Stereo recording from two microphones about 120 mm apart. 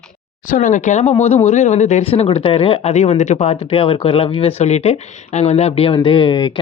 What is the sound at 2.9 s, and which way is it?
Speech, 75° left (ahead or behind).